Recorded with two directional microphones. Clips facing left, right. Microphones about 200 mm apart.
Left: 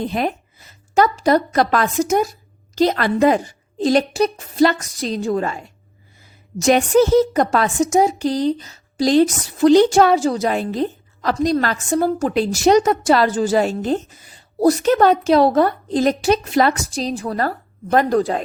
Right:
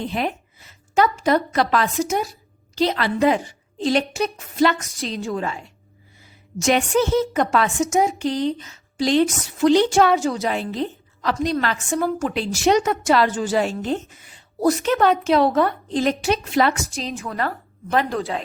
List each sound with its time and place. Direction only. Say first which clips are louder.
0.0 s a woman's voice: left 3 dB; 45° left (ahead or behind)